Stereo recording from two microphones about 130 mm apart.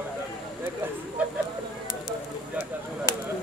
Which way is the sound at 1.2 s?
10° right (ahead or behind).